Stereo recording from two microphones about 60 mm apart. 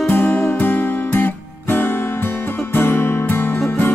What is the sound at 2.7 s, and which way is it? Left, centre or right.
Guitar, left.